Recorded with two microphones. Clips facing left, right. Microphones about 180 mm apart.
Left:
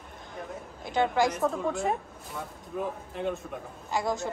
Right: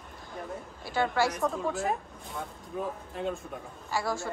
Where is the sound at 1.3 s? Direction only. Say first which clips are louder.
Left 2 dB; centre (ahead or behind).